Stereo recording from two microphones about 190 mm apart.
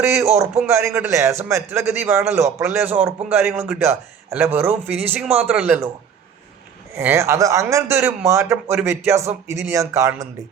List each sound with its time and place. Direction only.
0.0 s a man's voice: 15° right (ahead or behind)
6.9 s a man's voice: 15° right (ahead or behind)